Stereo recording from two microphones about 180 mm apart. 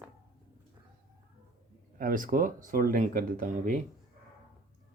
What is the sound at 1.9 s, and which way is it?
Speech, 50° right (ahead or behind).